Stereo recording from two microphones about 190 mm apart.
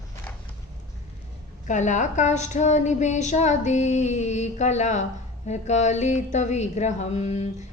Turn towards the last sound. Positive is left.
turn(degrees=35)  # may be behind; listen again after turning